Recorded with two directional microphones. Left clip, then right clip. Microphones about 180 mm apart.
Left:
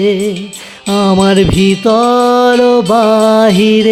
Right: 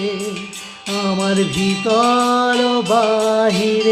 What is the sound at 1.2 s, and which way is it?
Music, 55° left (ahead or behind).